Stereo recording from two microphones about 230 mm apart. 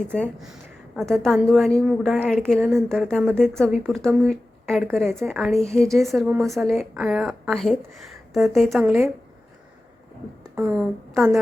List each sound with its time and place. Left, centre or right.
0.0 s speech: centre
10.5 s a woman's voice: centre